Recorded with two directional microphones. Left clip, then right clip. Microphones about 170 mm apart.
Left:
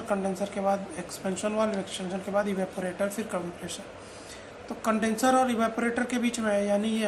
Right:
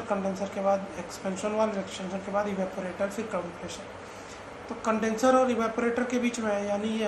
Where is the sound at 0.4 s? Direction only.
30° left (ahead or behind).